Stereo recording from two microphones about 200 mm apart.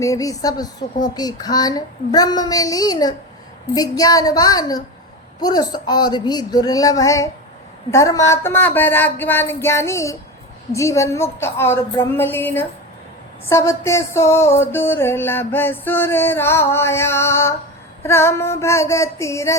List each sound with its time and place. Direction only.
0.0 s music: 15° left (ahead or behind)
1.0 s a child's voice: 20° left (ahead or behind)
7.9 s music: 15° left (ahead or behind)